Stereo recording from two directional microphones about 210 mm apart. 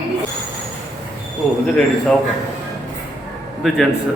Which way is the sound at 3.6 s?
Centre (ahead or behind).